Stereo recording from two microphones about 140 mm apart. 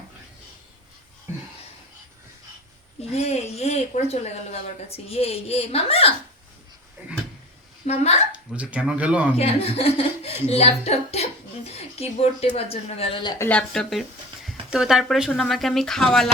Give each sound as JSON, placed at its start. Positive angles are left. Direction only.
{"t": 3.0, "sound": "speech", "side_deg": 45}
{"t": 7.9, "sound": "speech", "side_deg": 50}
{"t": 8.3, "sound": "speech", "side_deg": -10}
{"t": 9.3, "sound": "speech", "side_deg": 45}
{"t": 13.2, "sound": "speech", "side_deg": 25}
{"t": 13.5, "sound": "speech", "side_deg": 5}